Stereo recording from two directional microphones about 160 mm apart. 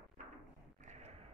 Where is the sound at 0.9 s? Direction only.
45° right (ahead or behind).